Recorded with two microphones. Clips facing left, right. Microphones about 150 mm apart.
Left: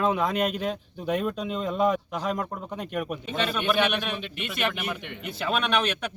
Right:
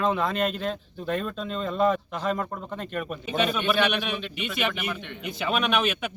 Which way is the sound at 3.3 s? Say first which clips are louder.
Right 3 dB; 5° right (ahead or behind).